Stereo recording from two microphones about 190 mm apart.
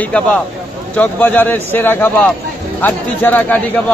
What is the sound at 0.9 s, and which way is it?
A man's voice, 10° left (ahead or behind).